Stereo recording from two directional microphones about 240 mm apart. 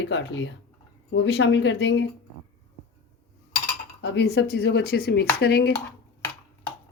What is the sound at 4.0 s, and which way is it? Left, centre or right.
Speech, left.